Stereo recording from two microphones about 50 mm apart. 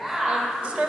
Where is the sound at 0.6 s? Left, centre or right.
Centre.